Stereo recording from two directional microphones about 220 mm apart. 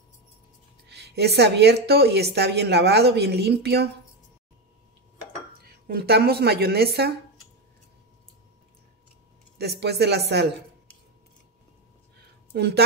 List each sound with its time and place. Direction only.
0.8 s a woman's voice: 50° right (ahead or behind)
5.6 s speech: 45° right (ahead or behind)
9.6 s a woman's voice: 50° right (ahead or behind)
12.2 s a sound: 45° right (ahead or behind)